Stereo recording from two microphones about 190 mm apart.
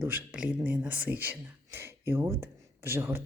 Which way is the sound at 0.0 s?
10° right (ahead or behind).